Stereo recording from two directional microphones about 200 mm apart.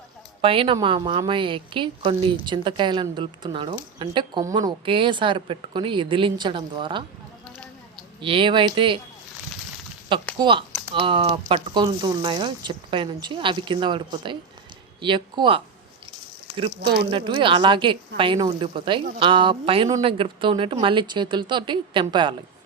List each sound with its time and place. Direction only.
0.4 s speech: 25° right (ahead or behind)
10.3 s speech: 25° right (ahead or behind)